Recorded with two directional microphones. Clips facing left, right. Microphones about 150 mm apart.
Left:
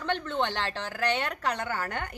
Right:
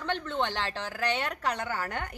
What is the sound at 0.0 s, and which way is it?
A woman's voice, centre (ahead or behind).